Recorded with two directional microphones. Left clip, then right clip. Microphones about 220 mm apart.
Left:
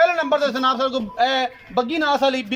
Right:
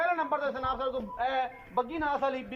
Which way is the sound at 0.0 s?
45° left (ahead or behind).